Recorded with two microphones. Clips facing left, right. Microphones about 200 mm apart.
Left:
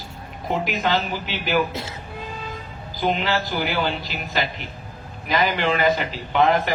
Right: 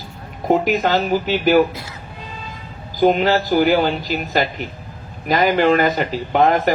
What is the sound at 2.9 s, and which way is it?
A man's voice, 45° right (ahead or behind).